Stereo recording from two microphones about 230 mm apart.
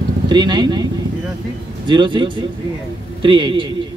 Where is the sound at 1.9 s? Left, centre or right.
Right.